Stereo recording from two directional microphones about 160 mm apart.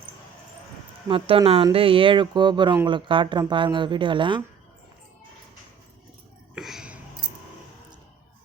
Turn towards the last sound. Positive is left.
turn(degrees=-5)  # may be behind; listen again after turning